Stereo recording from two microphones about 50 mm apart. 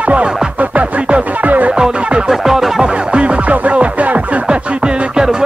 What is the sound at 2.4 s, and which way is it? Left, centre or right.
Music, centre.